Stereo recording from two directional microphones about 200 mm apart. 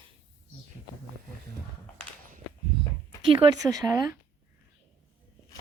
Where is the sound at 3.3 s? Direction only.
15° right (ahead or behind).